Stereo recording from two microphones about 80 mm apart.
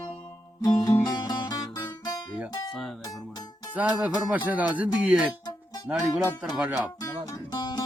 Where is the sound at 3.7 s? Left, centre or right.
Centre.